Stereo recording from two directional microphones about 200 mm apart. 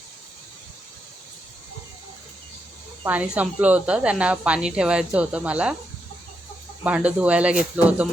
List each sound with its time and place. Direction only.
3.1 s a woman's voice: 5° right (ahead or behind)
6.8 s speech: 5° right (ahead or behind)